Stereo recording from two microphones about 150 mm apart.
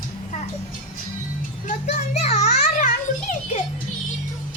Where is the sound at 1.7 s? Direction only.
50° left (ahead or behind).